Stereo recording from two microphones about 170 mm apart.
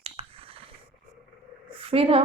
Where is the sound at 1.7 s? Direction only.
35° right (ahead or behind).